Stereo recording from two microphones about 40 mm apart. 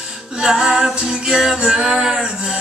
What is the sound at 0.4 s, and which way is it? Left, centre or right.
Music, centre.